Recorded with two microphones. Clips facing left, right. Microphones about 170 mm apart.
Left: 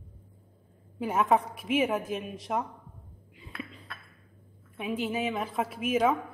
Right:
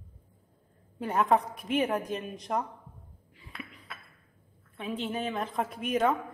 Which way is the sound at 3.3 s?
20° left (ahead or behind).